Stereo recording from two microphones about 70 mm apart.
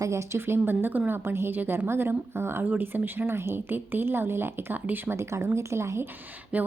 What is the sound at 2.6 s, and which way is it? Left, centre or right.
A woman's voice, right.